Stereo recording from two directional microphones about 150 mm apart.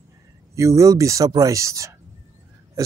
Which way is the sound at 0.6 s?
20° right (ahead or behind).